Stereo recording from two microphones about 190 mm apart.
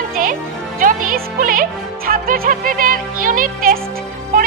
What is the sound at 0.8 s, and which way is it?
Music, 45° right (ahead or behind).